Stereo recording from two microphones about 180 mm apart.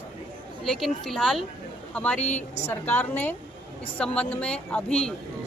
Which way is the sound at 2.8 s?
10° left (ahead or behind).